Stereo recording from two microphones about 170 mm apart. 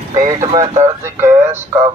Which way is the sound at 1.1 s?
15° right (ahead or behind).